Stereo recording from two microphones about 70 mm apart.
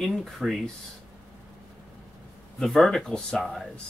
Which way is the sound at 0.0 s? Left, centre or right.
Centre.